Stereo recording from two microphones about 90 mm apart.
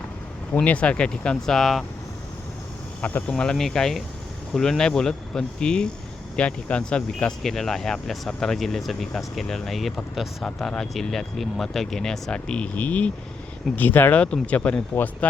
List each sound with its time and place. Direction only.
0.5 s speech: 15° left (ahead or behind)
3.0 s speech: 20° left (ahead or behind)